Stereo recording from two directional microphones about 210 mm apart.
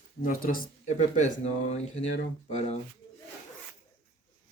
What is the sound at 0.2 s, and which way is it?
Speech, 45° left (ahead or behind).